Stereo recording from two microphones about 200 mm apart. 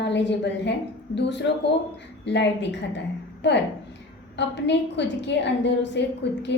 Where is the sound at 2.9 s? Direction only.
60° left (ahead or behind).